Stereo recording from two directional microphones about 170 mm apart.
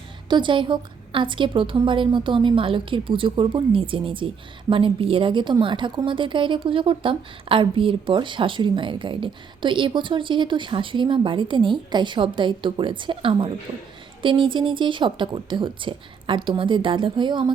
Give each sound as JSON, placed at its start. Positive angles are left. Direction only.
{"t": 0.3, "sound": "a woman's voice", "side_deg": -30}